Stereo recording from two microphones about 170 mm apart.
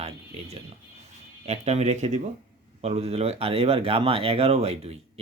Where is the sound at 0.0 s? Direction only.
35° right (ahead or behind).